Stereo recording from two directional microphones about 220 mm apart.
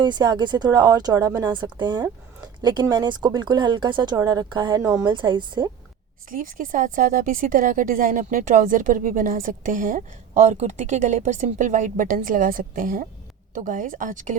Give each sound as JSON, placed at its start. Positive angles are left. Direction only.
{"t": 0.0, "sound": "speech", "side_deg": -20}
{"t": 6.3, "sound": "a woman's voice", "side_deg": -40}